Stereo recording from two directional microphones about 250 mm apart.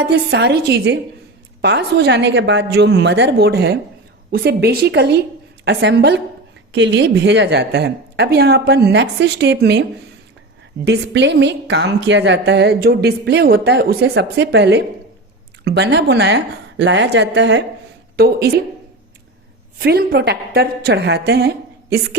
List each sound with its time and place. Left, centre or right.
0.0 s a woman's voice: right
10.8 s a woman's voice: right
19.8 s a woman's voice: right